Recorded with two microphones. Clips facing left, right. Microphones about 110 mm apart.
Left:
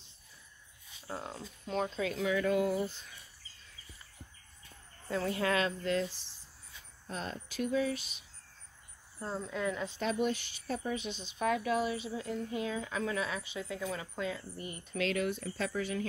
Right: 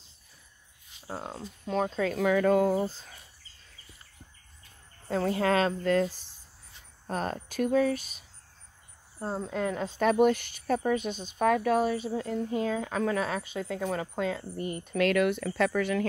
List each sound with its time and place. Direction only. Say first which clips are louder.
1.0 s speech: right 4 dB; 35° right (ahead or behind)
5.0 s a woman's voice: right 5 dB; 35° right (ahead or behind)
9.2 s speech: right 5 dB; 35° right (ahead or behind)
9.5 s a woman's voice: right 3 dB; 50° right (ahead or behind); by 16.1 s 65° right (ahead or behind)